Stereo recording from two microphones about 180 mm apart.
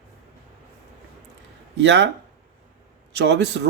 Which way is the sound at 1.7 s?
75° right (ahead or behind).